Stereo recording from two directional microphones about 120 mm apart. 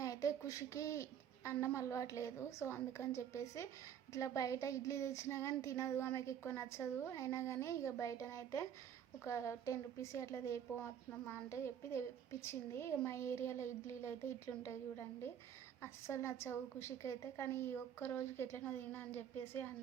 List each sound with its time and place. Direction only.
0.0 s a sound: 30° left (ahead or behind)
1.6 s speech: 25° left (ahead or behind)
15.8 s speech: 25° left (ahead or behind)